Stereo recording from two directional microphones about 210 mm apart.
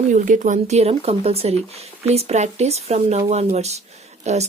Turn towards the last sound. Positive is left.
turn(degrees=-30)  # may be behind; listen again after turning